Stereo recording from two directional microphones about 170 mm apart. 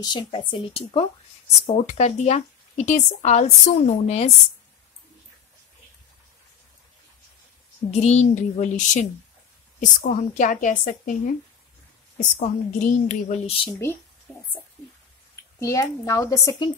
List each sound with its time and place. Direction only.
0.0 s speech: 25° left (ahead or behind)
7.9 s a woman's voice: 40° left (ahead or behind)
12.2 s a woman's voice: 45° left (ahead or behind)
14.3 s speech: 10° left (ahead or behind)
15.6 s speech: 20° left (ahead or behind)